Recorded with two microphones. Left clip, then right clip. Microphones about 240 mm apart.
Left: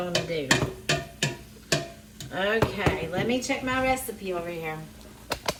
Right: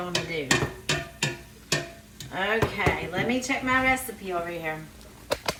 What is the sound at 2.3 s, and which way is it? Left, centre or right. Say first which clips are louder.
A woman's voice: even; centre.